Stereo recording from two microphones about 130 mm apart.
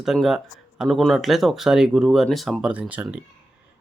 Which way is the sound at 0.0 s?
5° right (ahead or behind).